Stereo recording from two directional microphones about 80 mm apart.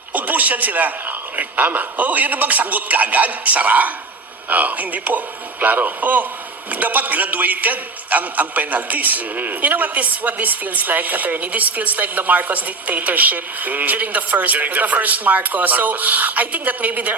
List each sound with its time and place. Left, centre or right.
0.1 s a man's voice: right